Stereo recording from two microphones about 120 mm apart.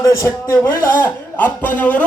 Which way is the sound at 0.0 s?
25° left (ahead or behind).